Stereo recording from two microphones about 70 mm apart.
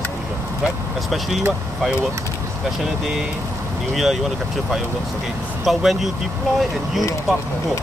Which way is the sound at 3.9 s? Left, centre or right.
Centre.